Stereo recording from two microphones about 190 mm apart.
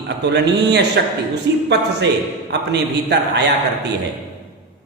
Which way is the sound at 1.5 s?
65° right (ahead or behind).